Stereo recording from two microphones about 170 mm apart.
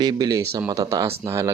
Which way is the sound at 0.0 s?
25° right (ahead or behind).